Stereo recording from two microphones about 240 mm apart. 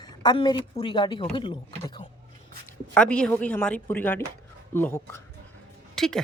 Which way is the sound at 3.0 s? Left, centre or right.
Centre.